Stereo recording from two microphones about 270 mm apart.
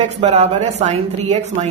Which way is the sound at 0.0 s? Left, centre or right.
Right.